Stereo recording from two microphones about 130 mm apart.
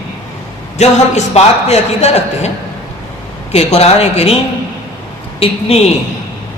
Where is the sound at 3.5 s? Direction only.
55° left (ahead or behind).